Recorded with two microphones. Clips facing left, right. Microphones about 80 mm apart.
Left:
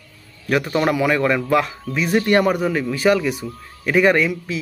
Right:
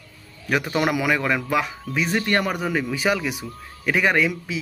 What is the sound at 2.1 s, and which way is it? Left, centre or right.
Speech, centre.